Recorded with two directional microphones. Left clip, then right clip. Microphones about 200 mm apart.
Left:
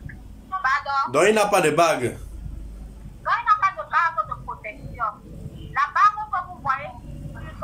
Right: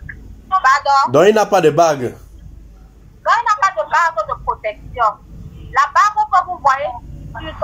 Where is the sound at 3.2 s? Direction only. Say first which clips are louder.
Right 6 dB; 35° right (ahead or behind).